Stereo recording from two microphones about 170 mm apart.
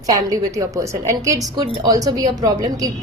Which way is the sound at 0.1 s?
20° right (ahead or behind).